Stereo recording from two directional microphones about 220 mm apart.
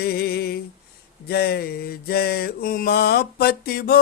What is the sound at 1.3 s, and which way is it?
Mantra, 45° left (ahead or behind).